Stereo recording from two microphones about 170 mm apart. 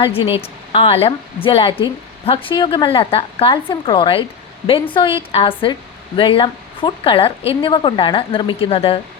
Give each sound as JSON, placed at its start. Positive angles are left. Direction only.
{"t": 0.0, "sound": "speech", "side_deg": 35}